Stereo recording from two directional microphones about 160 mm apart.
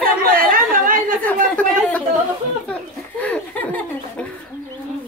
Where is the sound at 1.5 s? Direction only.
10° left (ahead or behind).